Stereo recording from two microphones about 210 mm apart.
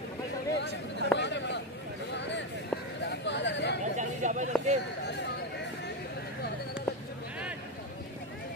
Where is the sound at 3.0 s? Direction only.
55° left (ahead or behind).